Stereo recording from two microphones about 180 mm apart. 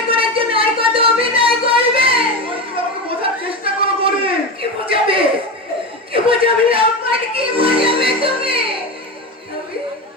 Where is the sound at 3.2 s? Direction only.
30° right (ahead or behind).